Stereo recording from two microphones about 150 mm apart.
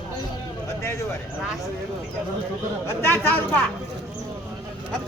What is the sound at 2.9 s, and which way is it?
Speech, 15° left (ahead or behind).